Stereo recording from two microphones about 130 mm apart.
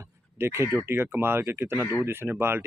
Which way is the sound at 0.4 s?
20° right (ahead or behind).